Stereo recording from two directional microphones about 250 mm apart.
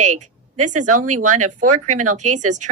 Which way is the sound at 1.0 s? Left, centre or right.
Right.